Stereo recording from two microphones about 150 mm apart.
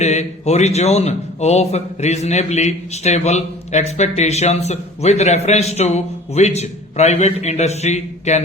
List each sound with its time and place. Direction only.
0.0 s a man's voice: 50° left (ahead or behind)